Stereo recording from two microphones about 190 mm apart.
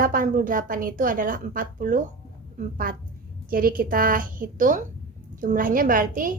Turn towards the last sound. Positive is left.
turn(degrees=-45)  # may be behind; listen again after turning